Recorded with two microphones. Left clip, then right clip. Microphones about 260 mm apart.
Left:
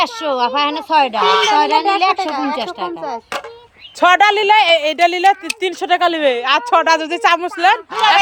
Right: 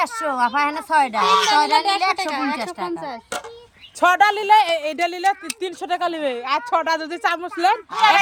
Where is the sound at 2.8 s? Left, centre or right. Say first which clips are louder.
Left 5 dB; right.